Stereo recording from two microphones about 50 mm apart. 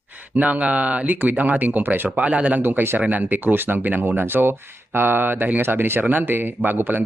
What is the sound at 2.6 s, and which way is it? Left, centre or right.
Speech, right.